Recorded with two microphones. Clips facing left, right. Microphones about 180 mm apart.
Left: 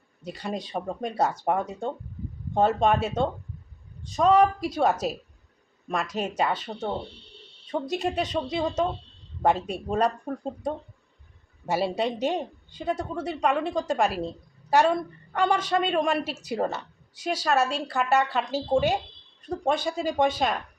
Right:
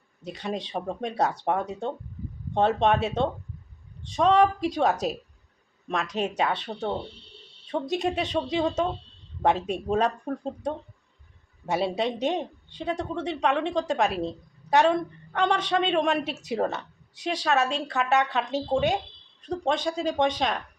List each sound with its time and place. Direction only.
0.2 s speech: centre (ahead or behind)